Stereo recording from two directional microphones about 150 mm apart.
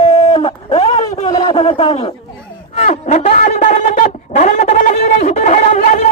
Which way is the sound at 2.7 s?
50° left (ahead or behind).